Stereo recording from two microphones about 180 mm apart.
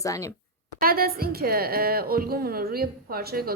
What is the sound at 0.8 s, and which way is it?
A woman's voice, 55° right (ahead or behind).